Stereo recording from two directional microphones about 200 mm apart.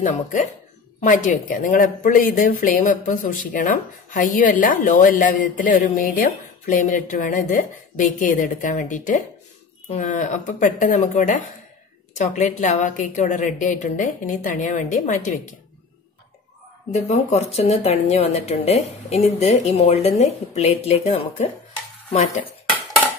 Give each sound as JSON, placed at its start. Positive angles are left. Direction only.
{"t": 0.0, "sound": "speech", "side_deg": 40}
{"t": 16.9, "sound": "speech", "side_deg": 35}